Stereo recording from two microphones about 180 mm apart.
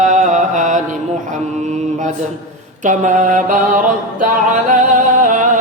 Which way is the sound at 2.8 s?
45° right (ahead or behind).